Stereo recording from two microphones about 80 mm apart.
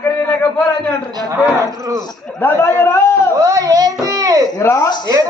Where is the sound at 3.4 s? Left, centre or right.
Right.